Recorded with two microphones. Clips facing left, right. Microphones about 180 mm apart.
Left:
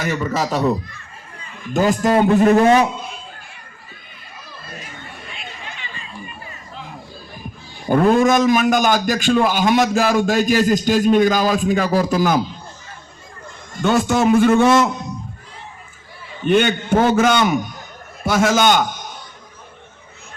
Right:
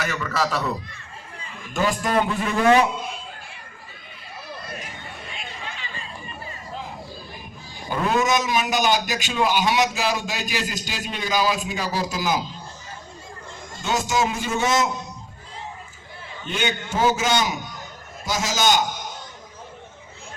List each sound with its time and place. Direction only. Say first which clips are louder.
0.0 s speech: left 4 dB; 40° left (ahead or behind)
1.7 s a man's voice: left 6 dB; 40° left (ahead or behind)
7.9 s a man's voice: left 8 dB; 50° left (ahead or behind)
13.8 s a man's voice: left 8 dB; 60° left (ahead or behind)
16.5 s a man's voice: left 11 dB; 55° left (ahead or behind)